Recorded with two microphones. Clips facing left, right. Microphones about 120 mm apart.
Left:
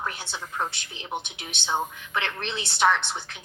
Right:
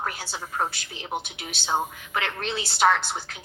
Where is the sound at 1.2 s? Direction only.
20° left (ahead or behind).